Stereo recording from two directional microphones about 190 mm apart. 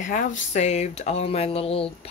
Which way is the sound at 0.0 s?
40° left (ahead or behind).